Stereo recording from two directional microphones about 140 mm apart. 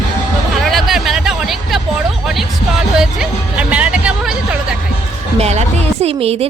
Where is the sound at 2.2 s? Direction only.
5° right (ahead or behind).